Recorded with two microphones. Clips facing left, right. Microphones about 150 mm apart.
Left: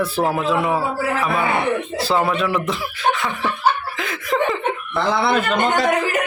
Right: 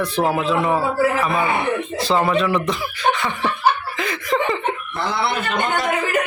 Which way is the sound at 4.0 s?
Centre (ahead or behind).